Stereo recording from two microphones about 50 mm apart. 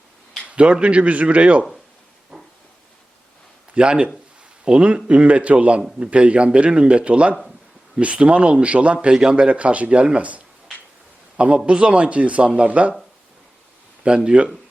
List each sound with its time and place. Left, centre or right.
0.4 s a man's voice: right
2.3 s a sound: centre
3.8 s a man's voice: centre
14.3 s a man's voice: centre